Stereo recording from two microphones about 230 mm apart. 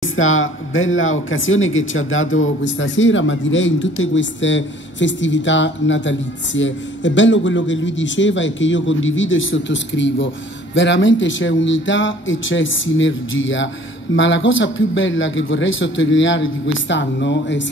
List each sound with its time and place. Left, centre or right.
0.1 s speech: left